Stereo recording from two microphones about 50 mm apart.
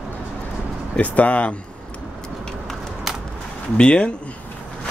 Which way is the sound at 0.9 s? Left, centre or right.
Left.